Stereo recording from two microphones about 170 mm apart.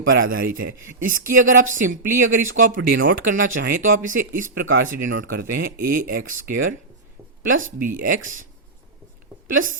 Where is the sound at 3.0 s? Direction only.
55° right (ahead or behind).